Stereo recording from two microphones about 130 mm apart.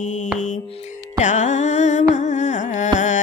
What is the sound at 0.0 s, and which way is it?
Music, 75° left (ahead or behind).